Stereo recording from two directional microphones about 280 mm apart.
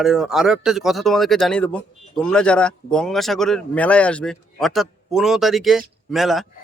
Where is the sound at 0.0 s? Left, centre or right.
Centre.